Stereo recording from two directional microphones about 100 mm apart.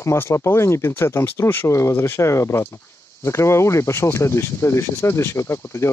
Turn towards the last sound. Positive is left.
turn(degrees=30)  # may be behind; listen again after turning